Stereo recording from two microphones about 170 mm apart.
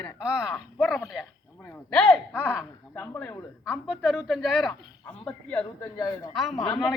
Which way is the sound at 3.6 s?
5° right (ahead or behind).